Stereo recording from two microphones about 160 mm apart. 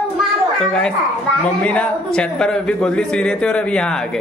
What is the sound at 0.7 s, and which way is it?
Speech, 5° left (ahead or behind).